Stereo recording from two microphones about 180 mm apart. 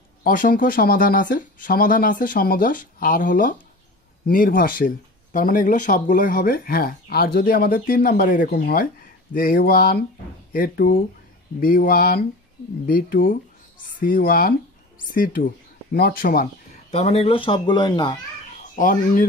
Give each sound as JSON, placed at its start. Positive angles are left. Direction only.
{"t": 0.2, "sound": "speech", "side_deg": 50}
{"t": 16.9, "sound": "speech", "side_deg": 35}
{"t": 18.8, "sound": "speech", "side_deg": 50}